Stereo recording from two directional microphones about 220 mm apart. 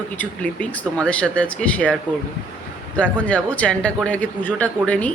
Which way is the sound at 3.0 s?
5° left (ahead or behind).